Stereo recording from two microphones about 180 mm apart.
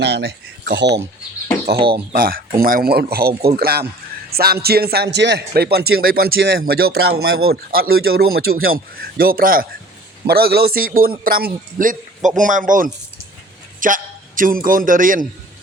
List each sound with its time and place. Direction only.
0.0 s speech: 65° right (ahead or behind)
1.9 s a man's voice: 55° right (ahead or behind)